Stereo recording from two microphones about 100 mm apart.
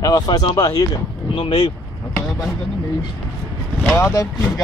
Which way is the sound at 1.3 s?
65° left (ahead or behind).